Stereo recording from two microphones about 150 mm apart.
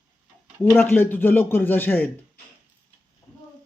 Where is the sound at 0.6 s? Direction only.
15° left (ahead or behind).